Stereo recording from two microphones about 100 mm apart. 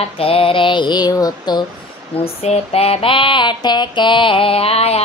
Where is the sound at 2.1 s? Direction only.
85° left.